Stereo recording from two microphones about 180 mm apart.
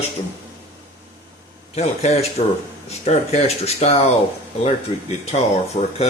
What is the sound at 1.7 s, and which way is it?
Speech, 35° left (ahead or behind).